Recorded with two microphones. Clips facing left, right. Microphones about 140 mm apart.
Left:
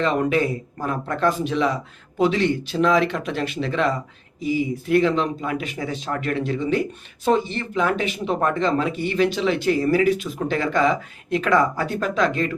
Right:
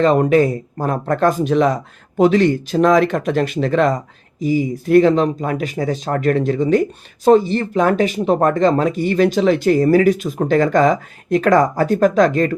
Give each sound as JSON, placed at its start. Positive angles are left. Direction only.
{"t": 0.0, "sound": "speech", "side_deg": -40}